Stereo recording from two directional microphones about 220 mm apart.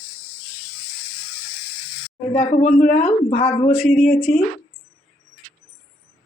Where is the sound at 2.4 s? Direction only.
30° left (ahead or behind).